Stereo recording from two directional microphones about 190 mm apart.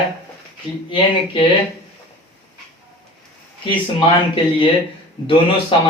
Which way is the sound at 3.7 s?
25° left (ahead or behind).